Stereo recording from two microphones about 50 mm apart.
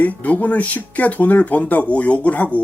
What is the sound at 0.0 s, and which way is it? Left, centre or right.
Speech, left.